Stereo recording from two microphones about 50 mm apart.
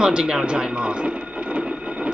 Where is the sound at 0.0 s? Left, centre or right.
Centre.